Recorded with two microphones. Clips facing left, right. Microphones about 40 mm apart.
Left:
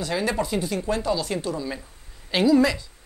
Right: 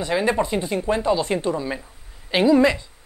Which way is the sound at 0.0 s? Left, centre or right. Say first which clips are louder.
Right 4 dB; right.